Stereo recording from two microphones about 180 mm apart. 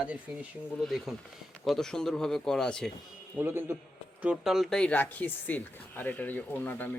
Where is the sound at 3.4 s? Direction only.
10° right (ahead or behind).